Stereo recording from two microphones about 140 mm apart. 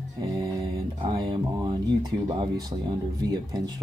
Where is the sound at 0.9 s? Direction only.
35° right (ahead or behind).